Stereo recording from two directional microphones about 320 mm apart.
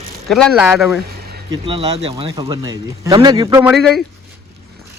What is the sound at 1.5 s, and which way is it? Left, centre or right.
Speech, centre.